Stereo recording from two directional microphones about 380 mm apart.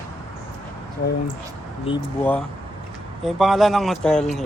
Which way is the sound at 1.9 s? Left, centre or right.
Centre.